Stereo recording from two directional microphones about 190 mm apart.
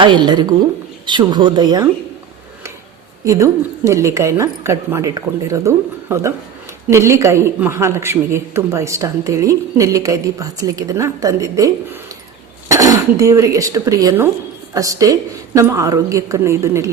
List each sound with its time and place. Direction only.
0.0 s speech: 25° right (ahead or behind)
3.2 s a woman's voice: 15° right (ahead or behind)